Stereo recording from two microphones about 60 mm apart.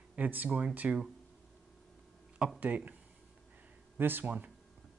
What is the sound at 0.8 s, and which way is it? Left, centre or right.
Speech, right.